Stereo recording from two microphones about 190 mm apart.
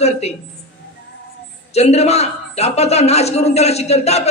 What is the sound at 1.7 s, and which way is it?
A man's voice, 35° left (ahead or behind).